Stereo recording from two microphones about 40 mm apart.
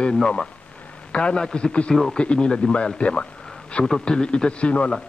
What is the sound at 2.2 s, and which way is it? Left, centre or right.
A man's voice, left.